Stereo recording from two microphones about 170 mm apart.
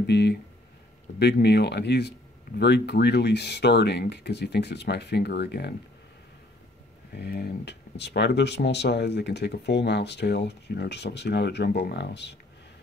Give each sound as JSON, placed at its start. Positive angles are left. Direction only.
{"t": 0.0, "sound": "speech", "side_deg": 75}
{"t": 7.1, "sound": "speech", "side_deg": 70}